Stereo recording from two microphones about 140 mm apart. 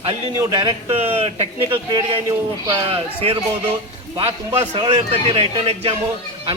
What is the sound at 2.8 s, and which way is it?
Speech, 40° right (ahead or behind).